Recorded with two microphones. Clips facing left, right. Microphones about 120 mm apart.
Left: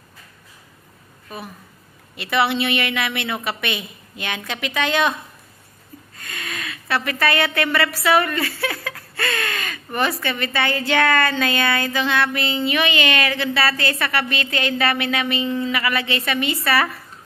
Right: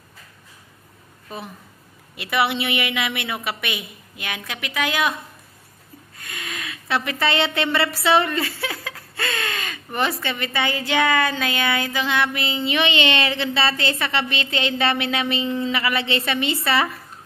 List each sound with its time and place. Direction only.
1.3 s a woman's voice: 25° right (ahead or behind)
2.1 s a woman's voice: 10° right (ahead or behind)
6.1 s a woman's voice: 15° right (ahead or behind)